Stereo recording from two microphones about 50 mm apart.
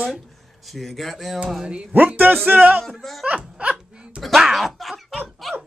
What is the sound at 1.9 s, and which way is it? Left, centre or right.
Speech, right.